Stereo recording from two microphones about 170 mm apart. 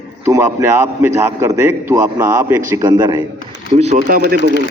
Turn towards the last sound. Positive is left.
turn(degrees=-60)  # may be behind; listen again after turning